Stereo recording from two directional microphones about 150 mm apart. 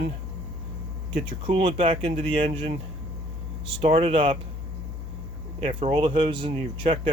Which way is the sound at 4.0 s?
40° right (ahead or behind).